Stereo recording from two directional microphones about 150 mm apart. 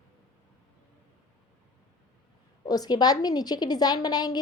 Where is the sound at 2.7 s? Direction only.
25° left (ahead or behind).